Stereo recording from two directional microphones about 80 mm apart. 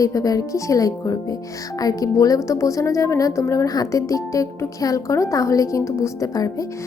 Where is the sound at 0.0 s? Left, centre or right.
Left.